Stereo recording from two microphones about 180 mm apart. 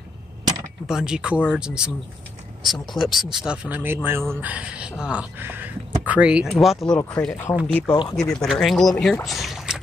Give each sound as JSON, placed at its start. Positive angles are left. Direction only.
{"t": 0.8, "sound": "speech", "side_deg": -5}
{"t": 7.0, "sound": "speech", "side_deg": 10}
{"t": 7.9, "sound": "speech", "side_deg": 20}
{"t": 8.2, "sound": "speech", "side_deg": 5}